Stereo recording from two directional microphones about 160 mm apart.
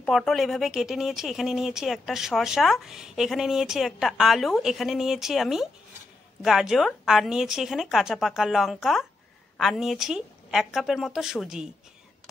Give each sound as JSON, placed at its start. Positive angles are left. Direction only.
{"t": 0.0, "sound": "speech", "side_deg": 0}